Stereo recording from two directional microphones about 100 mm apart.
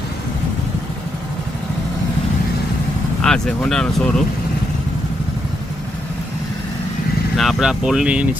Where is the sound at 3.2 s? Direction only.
5° left (ahead or behind).